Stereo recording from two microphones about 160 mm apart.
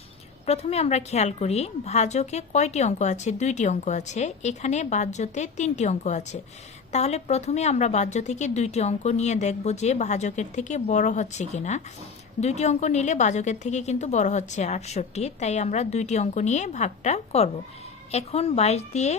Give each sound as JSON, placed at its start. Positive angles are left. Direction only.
{"t": 0.4, "sound": "a woman's voice", "side_deg": 40}